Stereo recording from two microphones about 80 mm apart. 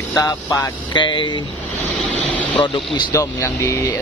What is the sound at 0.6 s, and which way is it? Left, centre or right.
Speech, left.